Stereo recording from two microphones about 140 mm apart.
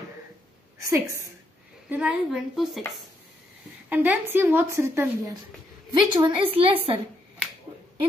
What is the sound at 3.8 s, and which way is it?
A woman's voice, 10° right (ahead or behind).